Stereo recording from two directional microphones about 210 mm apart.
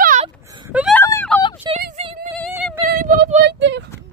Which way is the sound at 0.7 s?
5° right (ahead or behind).